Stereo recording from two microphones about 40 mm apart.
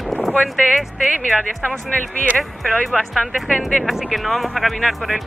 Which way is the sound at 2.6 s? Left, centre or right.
Centre.